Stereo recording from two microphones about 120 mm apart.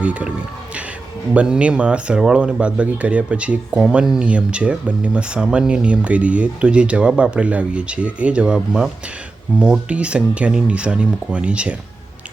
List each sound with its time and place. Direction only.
0.0 s speech: 10° right (ahead or behind)